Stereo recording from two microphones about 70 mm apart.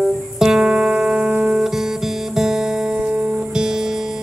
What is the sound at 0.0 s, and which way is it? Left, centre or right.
Music, centre.